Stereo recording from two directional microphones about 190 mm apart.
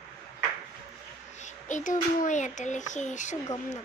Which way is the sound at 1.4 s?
40° left (ahead or behind).